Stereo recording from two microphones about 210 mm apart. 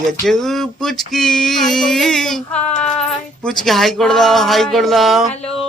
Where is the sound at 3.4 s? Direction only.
Centre (ahead or behind).